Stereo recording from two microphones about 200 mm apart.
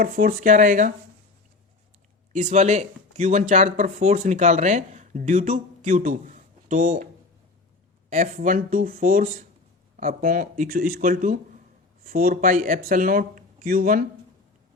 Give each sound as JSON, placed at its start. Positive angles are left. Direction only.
{"t": 0.0, "sound": "speech", "side_deg": -45}
{"t": 2.3, "sound": "speech", "side_deg": -35}
{"t": 8.1, "sound": "speech", "side_deg": -40}